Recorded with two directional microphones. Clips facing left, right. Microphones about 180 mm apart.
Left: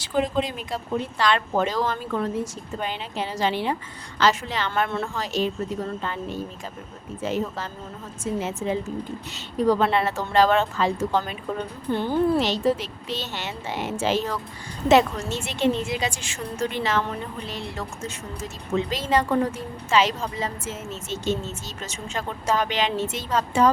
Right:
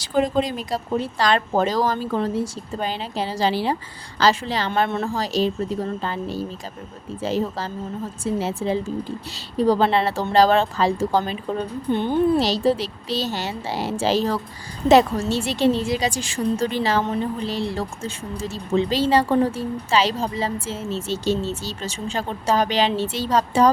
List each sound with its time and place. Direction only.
0.0 s speech: 40° right (ahead or behind)
4.7 s speech: 20° right (ahead or behind)
5.0 s speech: 35° right (ahead or behind)
11.9 s speech: 20° right (ahead or behind)
12.4 s speech: 35° right (ahead or behind)